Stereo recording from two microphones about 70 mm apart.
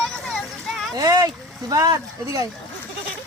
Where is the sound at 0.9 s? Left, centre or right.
Right.